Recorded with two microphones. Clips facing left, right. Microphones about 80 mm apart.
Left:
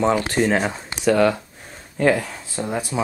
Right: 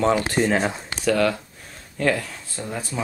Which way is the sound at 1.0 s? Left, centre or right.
Centre.